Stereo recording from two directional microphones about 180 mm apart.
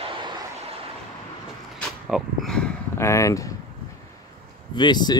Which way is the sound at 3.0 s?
15° left (ahead or behind).